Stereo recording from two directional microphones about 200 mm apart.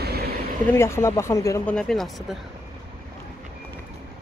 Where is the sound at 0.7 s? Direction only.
15° left (ahead or behind).